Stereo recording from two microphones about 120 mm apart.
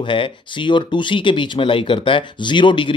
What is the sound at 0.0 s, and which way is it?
Speech, 45° left (ahead or behind).